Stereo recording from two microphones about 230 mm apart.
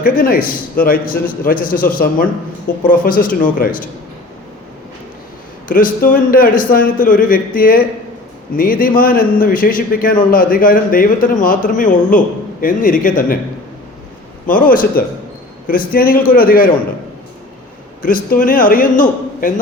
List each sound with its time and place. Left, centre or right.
0.0 s a man's voice: left
5.6 s a man's voice: left
14.4 s a man's voice: left
18.0 s a man's voice: left